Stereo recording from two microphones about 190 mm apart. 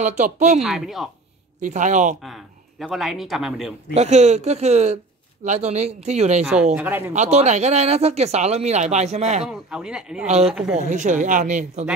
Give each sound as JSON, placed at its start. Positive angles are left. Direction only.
{"t": 0.0, "sound": "speech", "side_deg": -40}
{"t": 0.6, "sound": "speech", "side_deg": 0}
{"t": 1.6, "sound": "speech", "side_deg": -40}
{"t": 2.2, "sound": "speech", "side_deg": 0}
{"t": 3.9, "sound": "speech", "side_deg": -35}
{"t": 6.4, "sound": "speech", "side_deg": -5}
{"t": 7.2, "sound": "speech", "side_deg": -35}
{"t": 9.4, "sound": "speech", "side_deg": -5}
{"t": 10.2, "sound": "speech", "side_deg": -35}
{"t": 10.5, "sound": "speech", "side_deg": -5}
{"t": 10.9, "sound": "speech", "side_deg": -40}